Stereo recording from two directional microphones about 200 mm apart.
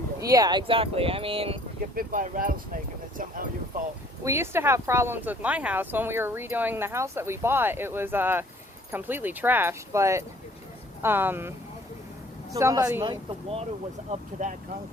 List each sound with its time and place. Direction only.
0.2 s speech: 15° right (ahead or behind)
2.0 s speech: 40° right (ahead or behind)
4.2 s speech: 15° right (ahead or behind)
12.5 s speech: 15° right (ahead or behind)
14.1 s speech: 40° right (ahead or behind)